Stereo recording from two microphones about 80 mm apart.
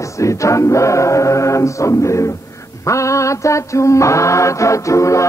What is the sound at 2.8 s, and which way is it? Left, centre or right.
Mantra, left.